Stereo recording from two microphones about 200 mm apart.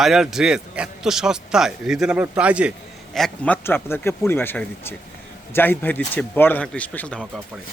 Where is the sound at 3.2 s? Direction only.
5° left (ahead or behind).